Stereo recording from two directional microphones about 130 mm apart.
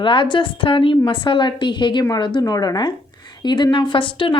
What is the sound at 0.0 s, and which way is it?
A woman's voice, 40° left (ahead or behind).